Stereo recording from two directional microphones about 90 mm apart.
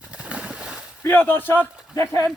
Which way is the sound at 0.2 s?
15° right (ahead or behind).